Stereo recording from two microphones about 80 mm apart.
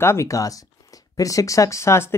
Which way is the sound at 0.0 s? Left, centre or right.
Left.